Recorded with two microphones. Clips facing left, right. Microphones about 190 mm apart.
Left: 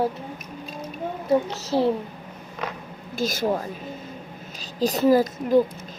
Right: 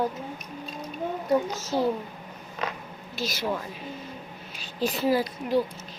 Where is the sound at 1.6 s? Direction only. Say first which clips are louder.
Left 4 dB; 30° left (ahead or behind).